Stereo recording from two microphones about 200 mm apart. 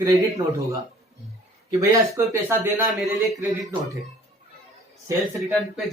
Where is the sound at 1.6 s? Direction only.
15° right (ahead or behind).